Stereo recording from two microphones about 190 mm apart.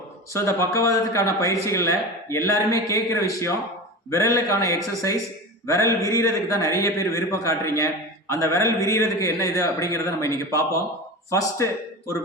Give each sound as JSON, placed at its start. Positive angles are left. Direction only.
{"t": 0.3, "sound": "a man's voice", "side_deg": 15}